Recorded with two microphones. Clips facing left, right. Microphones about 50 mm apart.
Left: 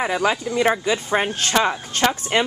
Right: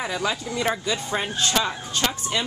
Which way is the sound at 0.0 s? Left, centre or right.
Left.